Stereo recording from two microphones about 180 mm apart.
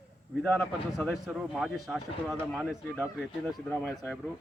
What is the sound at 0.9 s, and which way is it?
Speech, centre (ahead or behind).